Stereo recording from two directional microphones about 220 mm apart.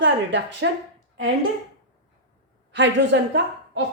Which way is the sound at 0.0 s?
55° right (ahead or behind).